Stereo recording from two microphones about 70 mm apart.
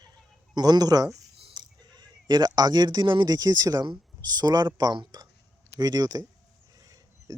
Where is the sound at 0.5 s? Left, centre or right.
Right.